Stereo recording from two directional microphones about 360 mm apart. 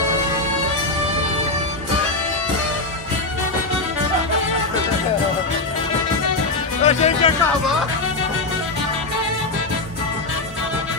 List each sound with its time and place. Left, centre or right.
6.8 s music: centre